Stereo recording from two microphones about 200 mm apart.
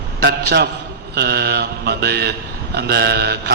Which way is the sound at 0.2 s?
55° right (ahead or behind).